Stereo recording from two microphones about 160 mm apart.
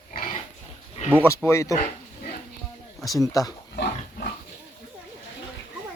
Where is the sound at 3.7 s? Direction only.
85° left.